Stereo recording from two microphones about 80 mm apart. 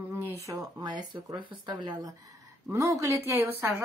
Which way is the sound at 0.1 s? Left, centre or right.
Right.